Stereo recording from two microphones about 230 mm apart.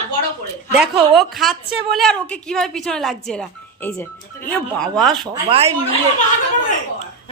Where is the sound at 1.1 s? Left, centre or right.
Centre.